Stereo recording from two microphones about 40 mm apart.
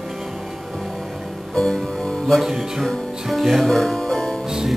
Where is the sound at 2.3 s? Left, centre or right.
Centre.